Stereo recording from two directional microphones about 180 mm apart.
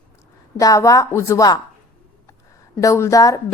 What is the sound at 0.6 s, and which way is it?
Speech, 20° left (ahead or behind).